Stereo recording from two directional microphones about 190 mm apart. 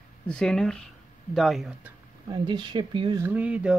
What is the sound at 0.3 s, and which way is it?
Speech, 5° left (ahead or behind).